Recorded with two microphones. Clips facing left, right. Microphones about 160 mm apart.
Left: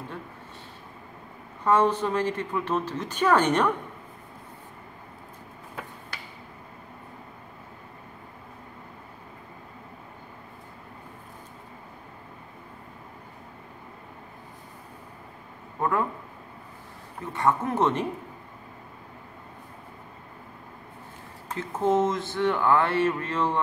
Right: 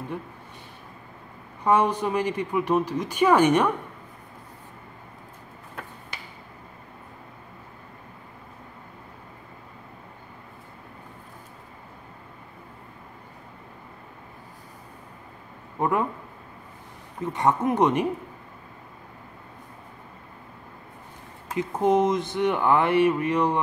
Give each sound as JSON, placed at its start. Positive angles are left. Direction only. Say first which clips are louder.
{"t": 1.6, "sound": "a woman's voice", "louder": "right 1 dB", "side_deg": -15}
{"t": 15.8, "sound": "a sound", "louder": "right 2 dB", "side_deg": -20}
{"t": 17.3, "sound": "a woman's voice", "louder": "right 2 dB", "side_deg": -20}
{"t": 21.5, "sound": "a woman's voice", "louder": "right 2 dB", "side_deg": -15}